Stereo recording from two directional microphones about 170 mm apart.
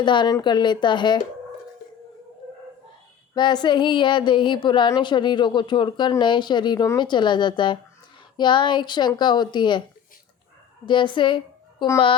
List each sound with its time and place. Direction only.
0.0 s a woman's voice: 25° left (ahead or behind)
3.3 s a woman's voice: 25° left (ahead or behind)
10.8 s a woman's voice: 30° left (ahead or behind)